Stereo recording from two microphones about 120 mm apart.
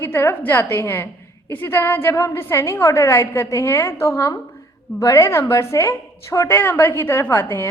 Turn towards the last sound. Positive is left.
turn(degrees=20)  # may be behind; listen again after turning